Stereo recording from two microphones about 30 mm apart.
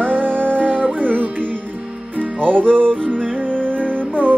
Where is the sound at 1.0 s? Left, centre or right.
Right.